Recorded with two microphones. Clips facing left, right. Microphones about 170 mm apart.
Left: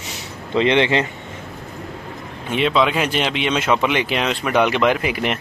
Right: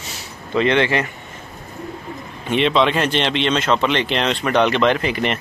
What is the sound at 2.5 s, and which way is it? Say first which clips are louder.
Speech: right 1 dB; 5° left (ahead or behind).